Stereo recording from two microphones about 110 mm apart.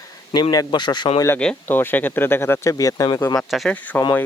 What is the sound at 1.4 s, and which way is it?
Speech, 15° left (ahead or behind).